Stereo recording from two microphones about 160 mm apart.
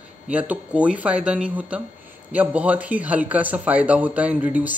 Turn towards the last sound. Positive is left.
turn(degrees=-10)  # may be behind; listen again after turning